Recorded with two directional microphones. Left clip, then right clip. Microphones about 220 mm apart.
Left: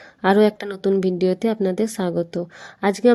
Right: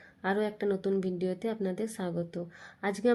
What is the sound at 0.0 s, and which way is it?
Speech, 45° left (ahead or behind).